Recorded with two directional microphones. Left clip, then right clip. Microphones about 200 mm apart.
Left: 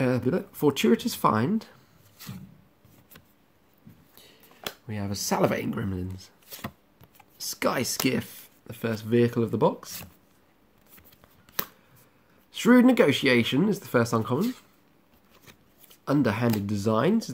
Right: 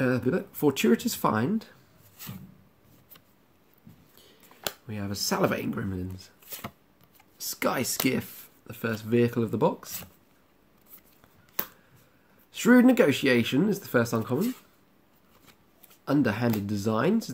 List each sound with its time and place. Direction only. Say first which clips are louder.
0.0 s speech: left 1 dB; 15° left (ahead or behind)
4.8 s speech: left 2 dB; 15° left (ahead or behind)
11.6 s a sound: left 3 dB; 25° left (ahead or behind)
12.5 s speech: left 1 dB; 10° left (ahead or behind)
16.1 s speech: left 1 dB; 20° left (ahead or behind)